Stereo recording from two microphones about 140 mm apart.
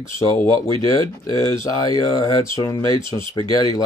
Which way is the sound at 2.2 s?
25° left (ahead or behind).